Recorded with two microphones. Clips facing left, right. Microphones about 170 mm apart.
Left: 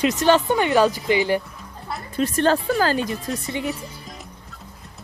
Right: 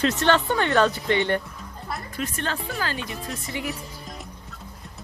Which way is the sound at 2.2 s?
40° left (ahead or behind).